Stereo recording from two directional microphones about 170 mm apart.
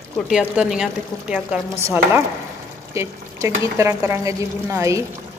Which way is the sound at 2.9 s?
15° right (ahead or behind).